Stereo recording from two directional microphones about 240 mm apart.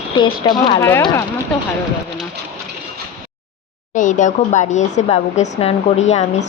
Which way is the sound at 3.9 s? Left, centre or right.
Left.